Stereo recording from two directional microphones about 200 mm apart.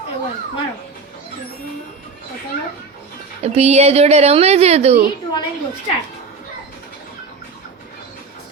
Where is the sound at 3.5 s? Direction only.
30° right (ahead or behind).